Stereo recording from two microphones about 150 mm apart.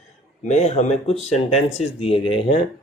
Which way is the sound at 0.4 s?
45° left (ahead or behind).